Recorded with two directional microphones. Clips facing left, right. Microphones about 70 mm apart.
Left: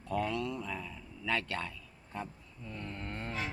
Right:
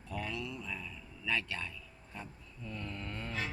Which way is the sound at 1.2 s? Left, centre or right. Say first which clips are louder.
Left 2 dB; left.